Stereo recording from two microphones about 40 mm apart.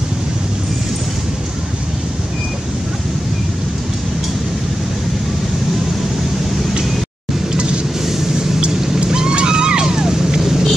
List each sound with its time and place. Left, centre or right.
8.8 s vehicle: centre